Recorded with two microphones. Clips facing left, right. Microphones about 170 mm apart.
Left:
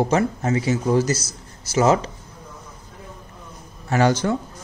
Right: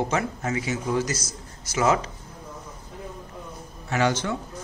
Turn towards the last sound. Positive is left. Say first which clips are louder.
# left 5 dB
turn(degrees=40)  # may be behind; listen again after turning